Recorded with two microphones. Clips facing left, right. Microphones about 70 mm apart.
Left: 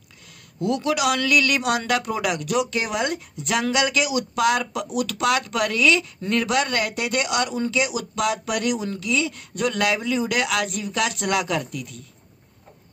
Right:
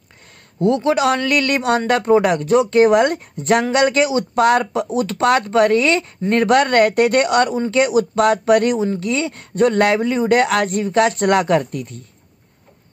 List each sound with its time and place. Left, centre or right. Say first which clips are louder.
0.6 s speech: right 7 dB; right